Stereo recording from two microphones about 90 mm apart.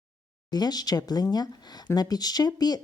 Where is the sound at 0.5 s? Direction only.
50° left (ahead or behind).